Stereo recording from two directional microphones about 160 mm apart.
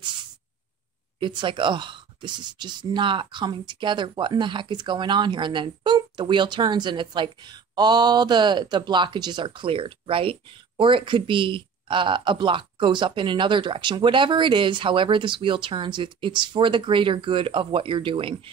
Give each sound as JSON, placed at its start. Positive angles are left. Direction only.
{"t": 1.2, "sound": "speech", "side_deg": -30}